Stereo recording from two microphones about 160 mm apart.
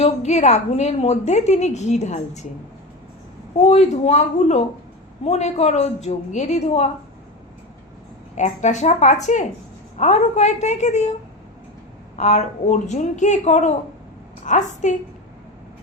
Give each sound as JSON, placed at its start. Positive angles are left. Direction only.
{"t": 0.0, "sound": "a woman's voice", "side_deg": 45}
{"t": 3.7, "sound": "a woman's voice", "side_deg": 45}
{"t": 8.4, "sound": "a woman's voice", "side_deg": 50}
{"t": 12.1, "sound": "a woman's voice", "side_deg": 45}